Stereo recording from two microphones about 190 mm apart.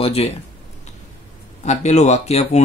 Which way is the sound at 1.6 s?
35° left (ahead or behind).